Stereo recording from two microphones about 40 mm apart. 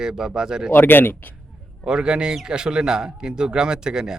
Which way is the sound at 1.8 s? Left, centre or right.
Right.